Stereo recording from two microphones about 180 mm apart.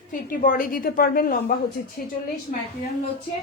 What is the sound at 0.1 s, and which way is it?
A woman's voice, 50° left (ahead or behind).